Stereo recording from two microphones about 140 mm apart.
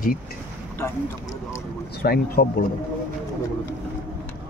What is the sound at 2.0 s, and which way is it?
Speech, 90° left.